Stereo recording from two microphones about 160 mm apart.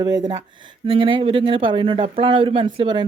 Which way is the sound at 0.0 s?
25° right (ahead or behind).